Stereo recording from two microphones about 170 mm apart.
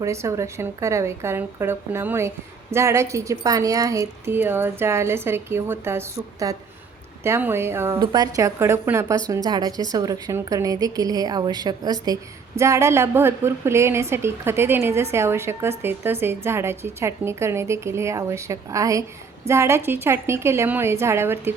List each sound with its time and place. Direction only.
0.0 s a woman's voice: 15° right (ahead or behind)